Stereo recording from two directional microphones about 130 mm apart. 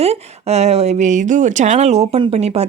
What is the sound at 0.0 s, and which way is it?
Speech, 55° right (ahead or behind).